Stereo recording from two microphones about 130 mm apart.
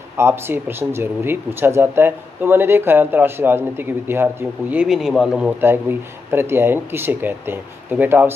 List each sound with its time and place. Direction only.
0.2 s speech: 20° right (ahead or behind)
5.6 s speech: 15° right (ahead or behind)